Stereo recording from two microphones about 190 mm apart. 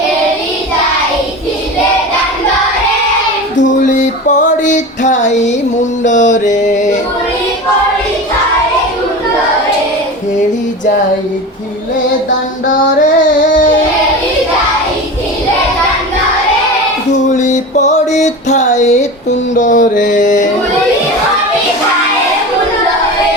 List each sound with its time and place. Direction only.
3.6 s music: 40° left (ahead or behind)
12.6 s music: 45° left (ahead or behind)
17.3 s music: 40° left (ahead or behind)